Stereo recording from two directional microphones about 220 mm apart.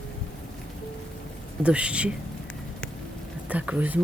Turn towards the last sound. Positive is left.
turn(degrees=-5)  # may be behind; listen again after turning